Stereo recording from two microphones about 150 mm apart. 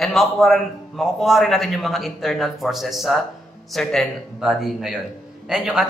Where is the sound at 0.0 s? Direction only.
Centre (ahead or behind).